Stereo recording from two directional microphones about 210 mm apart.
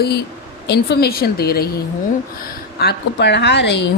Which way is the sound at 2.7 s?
50° left (ahead or behind).